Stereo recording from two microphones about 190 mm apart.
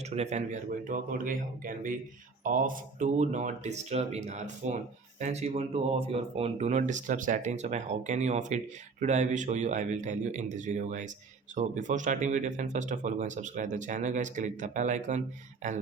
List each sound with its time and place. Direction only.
0.0 s a man's voice: 35° right (ahead or behind)